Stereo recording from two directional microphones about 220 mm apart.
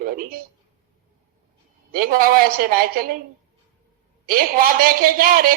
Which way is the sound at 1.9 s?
40° right (ahead or behind).